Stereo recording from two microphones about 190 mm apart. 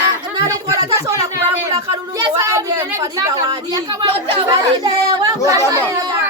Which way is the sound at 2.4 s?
15° right (ahead or behind).